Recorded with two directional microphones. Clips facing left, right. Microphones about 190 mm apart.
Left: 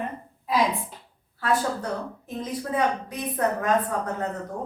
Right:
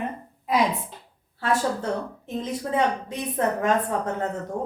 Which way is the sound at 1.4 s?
25° right (ahead or behind).